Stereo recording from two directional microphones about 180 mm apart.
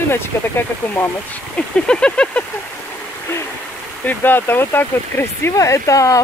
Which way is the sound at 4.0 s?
10° left (ahead or behind).